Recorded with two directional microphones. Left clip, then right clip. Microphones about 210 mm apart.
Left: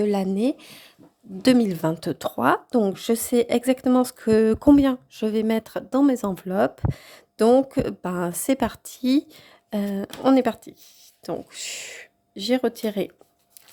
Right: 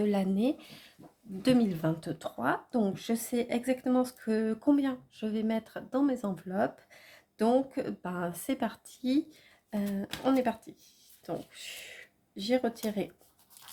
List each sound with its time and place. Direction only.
0.0 s speech: 30° left (ahead or behind); by 13.1 s 50° left (ahead or behind)